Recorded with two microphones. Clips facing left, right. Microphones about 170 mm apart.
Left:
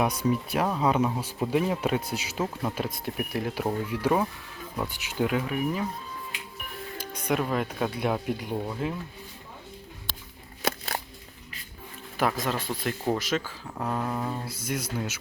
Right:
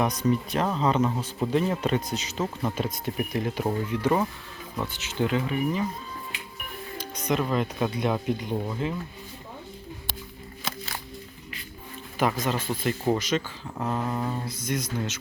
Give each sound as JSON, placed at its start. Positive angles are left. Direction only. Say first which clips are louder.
{"t": 0.0, "sound": "speech", "louder": "right 1 dB", "side_deg": 10}
{"t": 7.3, "sound": "speech", "louder": "right 1 dB", "side_deg": 5}
{"t": 10.6, "sound": "a sound", "louder": "left 6 dB", "side_deg": 65}
{"t": 12.2, "sound": "speech", "louder": "right 1 dB", "side_deg": 0}